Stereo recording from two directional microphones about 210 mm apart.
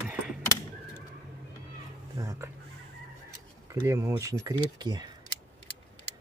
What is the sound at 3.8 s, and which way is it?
Speech, 15° right (ahead or behind).